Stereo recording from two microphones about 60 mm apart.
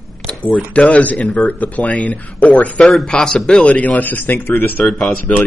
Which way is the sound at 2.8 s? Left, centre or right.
Centre.